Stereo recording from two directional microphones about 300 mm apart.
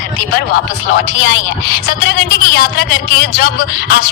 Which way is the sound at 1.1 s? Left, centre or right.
Left.